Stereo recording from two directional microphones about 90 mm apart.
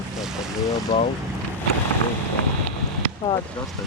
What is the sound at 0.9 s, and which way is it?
Speech, 60° left (ahead or behind).